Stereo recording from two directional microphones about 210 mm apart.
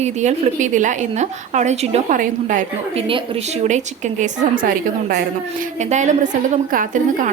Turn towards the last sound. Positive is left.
turn(degrees=-40)  # may be behind; listen again after turning